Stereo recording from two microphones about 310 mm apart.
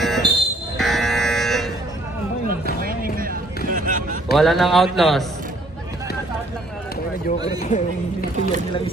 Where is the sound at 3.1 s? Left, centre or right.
Right.